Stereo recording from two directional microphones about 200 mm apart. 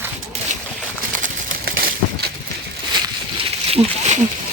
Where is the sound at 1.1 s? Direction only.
40° right (ahead or behind).